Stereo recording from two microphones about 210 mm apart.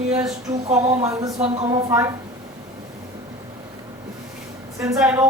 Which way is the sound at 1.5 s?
30° right (ahead or behind).